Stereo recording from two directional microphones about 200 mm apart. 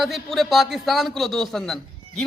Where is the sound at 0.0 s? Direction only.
Centre (ahead or behind).